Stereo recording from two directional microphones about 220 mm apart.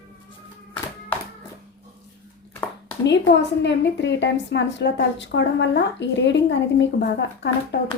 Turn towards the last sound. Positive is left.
turn(degrees=50)  # may be behind; listen again after turning